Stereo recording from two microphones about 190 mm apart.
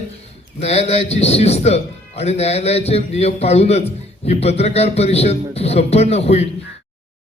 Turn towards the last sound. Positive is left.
turn(degrees=35)  # may be behind; listen again after turning